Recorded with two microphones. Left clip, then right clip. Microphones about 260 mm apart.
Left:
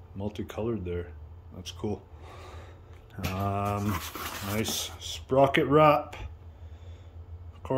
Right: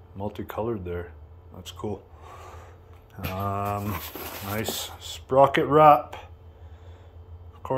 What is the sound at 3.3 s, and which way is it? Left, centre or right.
Speech, centre.